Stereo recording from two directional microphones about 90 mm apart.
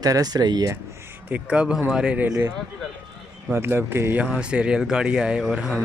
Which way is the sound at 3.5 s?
25° right (ahead or behind).